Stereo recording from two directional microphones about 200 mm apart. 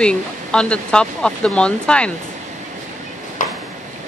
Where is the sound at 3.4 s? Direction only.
40° left (ahead or behind).